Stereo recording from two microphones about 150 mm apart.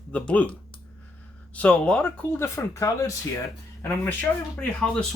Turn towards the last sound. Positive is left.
turn(degrees=5)  # may be behind; listen again after turning